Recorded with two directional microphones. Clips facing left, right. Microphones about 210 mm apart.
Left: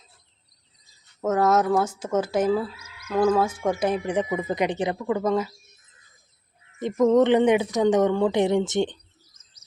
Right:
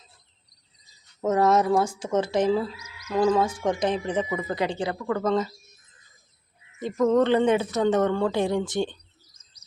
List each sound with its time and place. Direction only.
1.2 s speech: centre (ahead or behind)
6.7 s speech: 20° left (ahead or behind)